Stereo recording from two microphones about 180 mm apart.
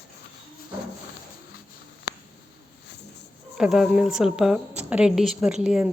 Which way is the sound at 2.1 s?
65° left (ahead or behind).